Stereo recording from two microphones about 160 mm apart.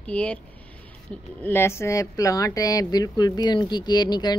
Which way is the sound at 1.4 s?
15° left (ahead or behind).